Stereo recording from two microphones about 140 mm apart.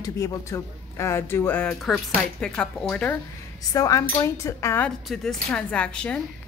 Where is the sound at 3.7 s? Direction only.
25° left (ahead or behind).